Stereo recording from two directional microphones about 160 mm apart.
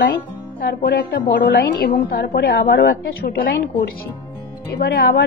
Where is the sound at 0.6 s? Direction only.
75° left (ahead or behind).